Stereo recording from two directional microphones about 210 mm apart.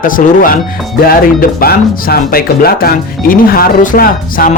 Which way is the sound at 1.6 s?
45° left (ahead or behind).